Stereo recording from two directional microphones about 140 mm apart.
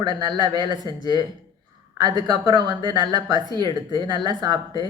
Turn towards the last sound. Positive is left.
turn(degrees=-30)  # may be behind; listen again after turning